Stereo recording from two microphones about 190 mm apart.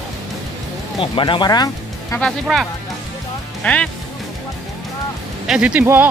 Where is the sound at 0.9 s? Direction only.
25° left (ahead or behind).